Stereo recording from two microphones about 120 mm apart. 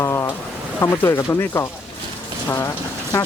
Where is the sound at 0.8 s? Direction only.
20° left (ahead or behind).